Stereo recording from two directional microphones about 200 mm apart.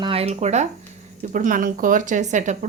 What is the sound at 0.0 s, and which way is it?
Speech, 30° right (ahead or behind).